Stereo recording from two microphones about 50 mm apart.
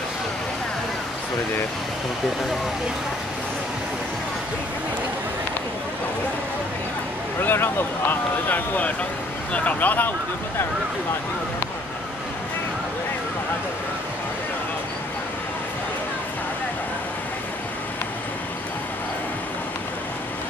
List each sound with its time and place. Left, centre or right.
7.3 s speech: left